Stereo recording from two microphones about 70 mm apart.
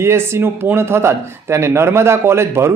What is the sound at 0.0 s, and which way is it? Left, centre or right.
Speech, right.